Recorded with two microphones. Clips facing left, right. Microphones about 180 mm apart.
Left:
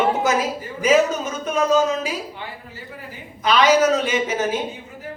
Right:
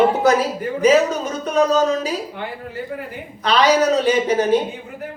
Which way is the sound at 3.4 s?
35° right (ahead or behind).